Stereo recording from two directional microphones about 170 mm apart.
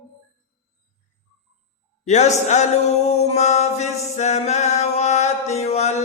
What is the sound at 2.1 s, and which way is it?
Chant, 45° left (ahead or behind).